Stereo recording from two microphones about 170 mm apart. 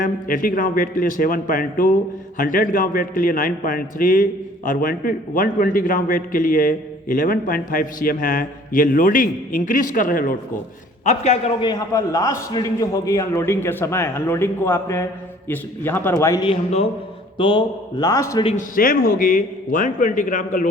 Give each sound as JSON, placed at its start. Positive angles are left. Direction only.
{"t": 0.0, "sound": "a man's voice", "side_deg": 50}
{"t": 11.0, "sound": "a man's voice", "side_deg": 40}
{"t": 11.6, "sound": "a man's voice", "side_deg": 20}
{"t": 16.4, "sound": "a man's voice", "side_deg": 35}
{"t": 18.5, "sound": "a man's voice", "side_deg": 55}